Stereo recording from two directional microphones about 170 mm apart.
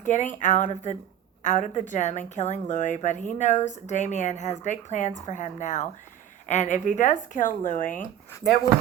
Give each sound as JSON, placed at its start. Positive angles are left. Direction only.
{"t": 0.0, "sound": "speech", "side_deg": 50}